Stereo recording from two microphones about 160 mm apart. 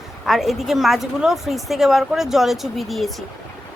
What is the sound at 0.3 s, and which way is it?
Speech, centre (ahead or behind).